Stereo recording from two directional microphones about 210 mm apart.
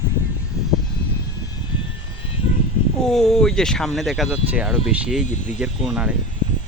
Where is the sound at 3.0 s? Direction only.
Centre (ahead or behind).